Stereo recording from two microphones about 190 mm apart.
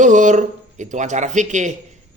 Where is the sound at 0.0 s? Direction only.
40° right (ahead or behind).